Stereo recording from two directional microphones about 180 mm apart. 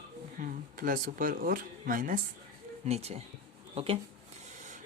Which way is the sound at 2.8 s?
35° right (ahead or behind).